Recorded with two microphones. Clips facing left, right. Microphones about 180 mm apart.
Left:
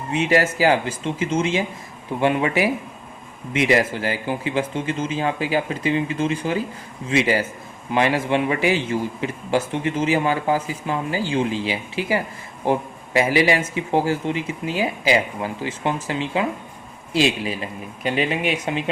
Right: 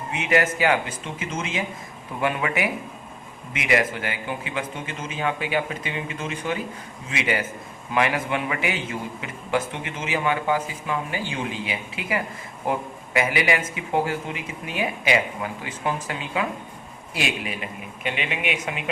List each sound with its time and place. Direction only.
0.1 s a man's voice: 30° left (ahead or behind)